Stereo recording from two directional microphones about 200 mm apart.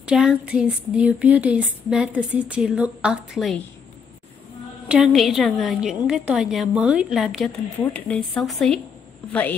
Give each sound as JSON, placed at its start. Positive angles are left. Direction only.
{"t": 0.0, "sound": "a woman's voice", "side_deg": -5}
{"t": 4.8, "sound": "a woman's voice", "side_deg": -5}